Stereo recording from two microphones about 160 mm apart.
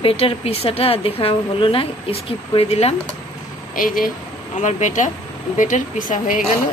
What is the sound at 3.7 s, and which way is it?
Speech, 60° left (ahead or behind).